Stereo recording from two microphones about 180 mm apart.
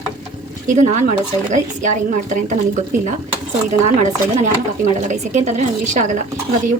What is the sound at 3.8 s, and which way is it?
A woman's voice, 40° right (ahead or behind).